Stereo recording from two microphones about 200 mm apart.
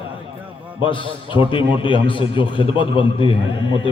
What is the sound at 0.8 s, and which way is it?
A man's voice, 25° left (ahead or behind).